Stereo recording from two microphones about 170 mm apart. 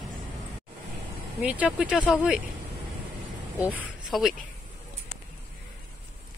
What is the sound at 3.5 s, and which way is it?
Speech, 10° right (ahead or behind).